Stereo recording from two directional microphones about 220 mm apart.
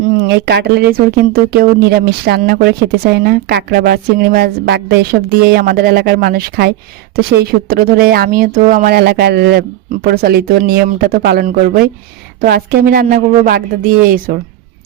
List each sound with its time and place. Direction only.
0.3 s speech: 50° right (ahead or behind)